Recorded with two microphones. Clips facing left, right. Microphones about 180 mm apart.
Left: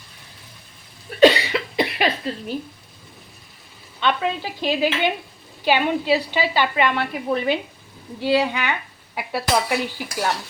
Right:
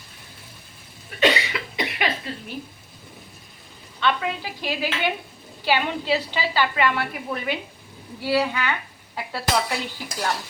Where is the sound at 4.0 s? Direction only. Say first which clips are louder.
Left 2 dB; 25° left (ahead or behind).